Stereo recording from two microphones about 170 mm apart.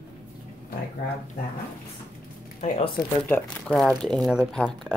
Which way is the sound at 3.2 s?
5° left (ahead or behind).